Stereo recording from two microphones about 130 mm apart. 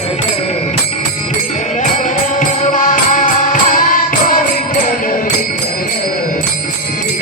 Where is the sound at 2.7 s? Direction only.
90° left.